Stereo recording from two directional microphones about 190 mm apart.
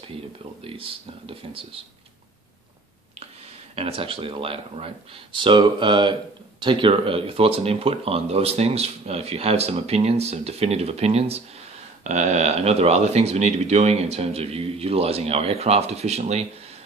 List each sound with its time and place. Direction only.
0.7 s speech: 30° right (ahead or behind)
3.7 s speech: 30° right (ahead or behind)